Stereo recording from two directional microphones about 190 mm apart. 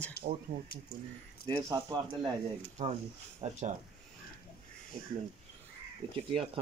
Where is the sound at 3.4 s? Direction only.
35° right (ahead or behind).